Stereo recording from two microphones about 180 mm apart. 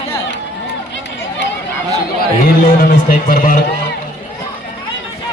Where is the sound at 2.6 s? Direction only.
55° left (ahead or behind).